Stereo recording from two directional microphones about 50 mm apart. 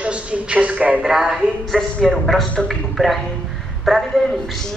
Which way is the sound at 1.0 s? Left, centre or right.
Centre.